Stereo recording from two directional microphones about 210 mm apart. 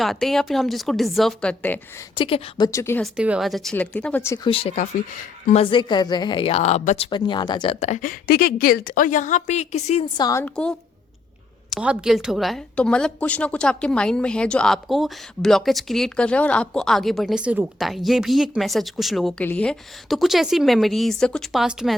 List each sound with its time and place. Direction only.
0.0 s a woman's voice: centre (ahead or behind)
2.1 s a woman's voice: 25° left (ahead or behind)
2.6 s speech: 15° left (ahead or behind)
3.0 s a woman's voice: 5° right (ahead or behind)
4.4 s a woman's voice: 25° left (ahead or behind)
10.2 s speech: 15° left (ahead or behind)
10.4 s a woman's voice: 5° left (ahead or behind)